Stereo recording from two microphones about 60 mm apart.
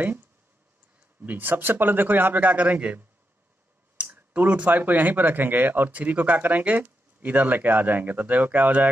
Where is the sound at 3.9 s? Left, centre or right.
Centre.